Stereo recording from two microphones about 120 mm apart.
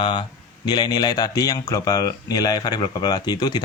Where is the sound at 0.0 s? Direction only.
45° left (ahead or behind).